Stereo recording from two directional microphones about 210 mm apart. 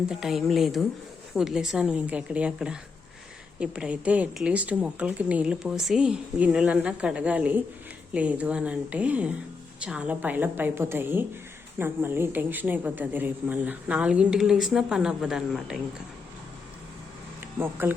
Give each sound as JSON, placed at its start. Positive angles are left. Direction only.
{"t": 0.1, "sound": "a woman's voice", "side_deg": 0}
{"t": 17.4, "sound": "speech", "side_deg": -10}